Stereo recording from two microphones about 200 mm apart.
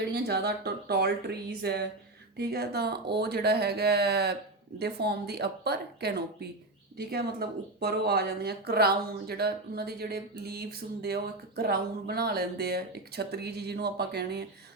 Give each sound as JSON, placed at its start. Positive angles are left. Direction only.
{"t": 0.1, "sound": "speech", "side_deg": -55}